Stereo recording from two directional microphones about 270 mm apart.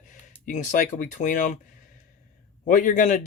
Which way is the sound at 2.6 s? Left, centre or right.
Left.